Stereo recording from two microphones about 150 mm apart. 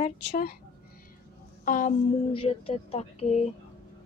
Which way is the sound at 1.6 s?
60° left (ahead or behind).